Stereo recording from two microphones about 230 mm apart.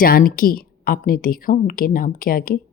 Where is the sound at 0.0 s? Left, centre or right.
Left.